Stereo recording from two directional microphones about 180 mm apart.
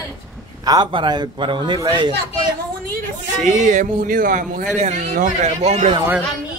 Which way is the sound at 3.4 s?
45° right (ahead or behind).